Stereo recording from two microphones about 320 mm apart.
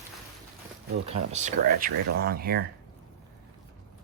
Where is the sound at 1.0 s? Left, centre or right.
Right.